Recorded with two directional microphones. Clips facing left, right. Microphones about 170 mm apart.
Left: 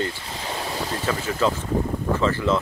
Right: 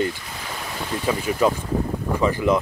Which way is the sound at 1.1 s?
15° right (ahead or behind).